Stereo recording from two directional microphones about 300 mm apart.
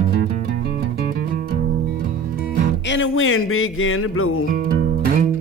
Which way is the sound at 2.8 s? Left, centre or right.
Left.